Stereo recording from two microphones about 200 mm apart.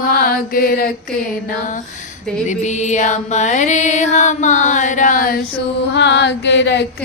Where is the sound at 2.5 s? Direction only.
35° left (ahead or behind).